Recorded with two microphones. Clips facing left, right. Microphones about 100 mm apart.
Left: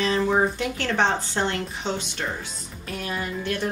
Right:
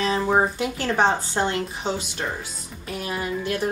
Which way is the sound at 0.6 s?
10° right (ahead or behind).